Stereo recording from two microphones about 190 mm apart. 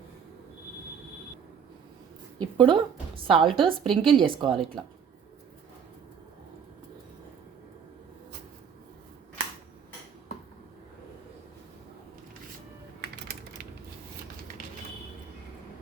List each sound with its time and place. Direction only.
2.4 s a woman's voice: 25° right (ahead or behind)